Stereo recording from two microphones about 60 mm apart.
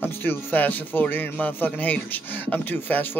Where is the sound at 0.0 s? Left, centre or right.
Left.